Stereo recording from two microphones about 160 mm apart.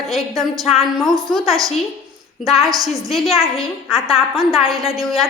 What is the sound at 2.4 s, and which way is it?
Speech, centre (ahead or behind).